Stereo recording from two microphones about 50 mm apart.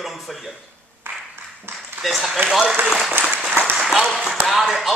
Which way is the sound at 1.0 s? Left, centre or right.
Right.